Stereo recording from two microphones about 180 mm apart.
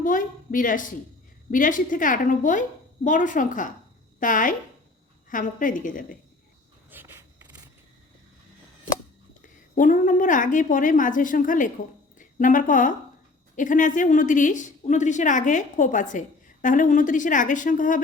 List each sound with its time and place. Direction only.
0.0 s a woman's voice: 50° left (ahead or behind)
6.9 s a sound: 10° right (ahead or behind)
9.4 s a woman's voice: 45° left (ahead or behind)